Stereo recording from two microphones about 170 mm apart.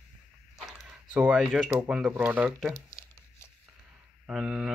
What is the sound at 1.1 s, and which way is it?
Speech, 5° right (ahead or behind).